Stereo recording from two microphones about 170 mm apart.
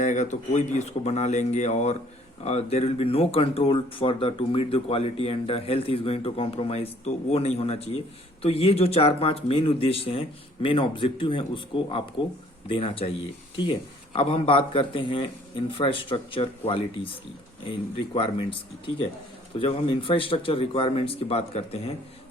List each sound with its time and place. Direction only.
0.0 s speech: 45° left (ahead or behind); by 18.4 s 30° left (ahead or behind)
19.5 s speech: 30° left (ahead or behind)